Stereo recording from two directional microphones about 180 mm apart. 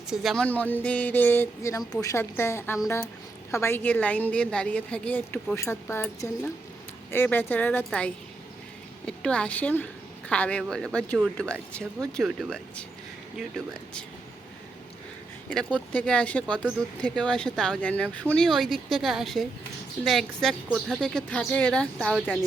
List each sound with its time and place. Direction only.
0.1 s a woman's voice: centre (ahead or behind)
15.4 s speech: 5° left (ahead or behind)